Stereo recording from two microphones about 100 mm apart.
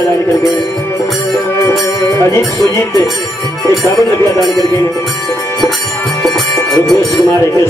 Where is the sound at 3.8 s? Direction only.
30° left (ahead or behind).